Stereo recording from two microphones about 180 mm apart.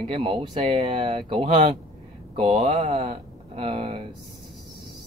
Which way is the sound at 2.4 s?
40° right (ahead or behind).